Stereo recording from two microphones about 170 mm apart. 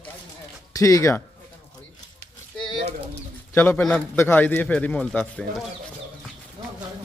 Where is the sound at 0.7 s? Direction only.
20° left (ahead or behind).